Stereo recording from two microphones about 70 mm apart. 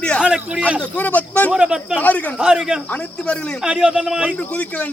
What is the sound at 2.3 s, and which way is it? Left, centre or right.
A man's voice, centre.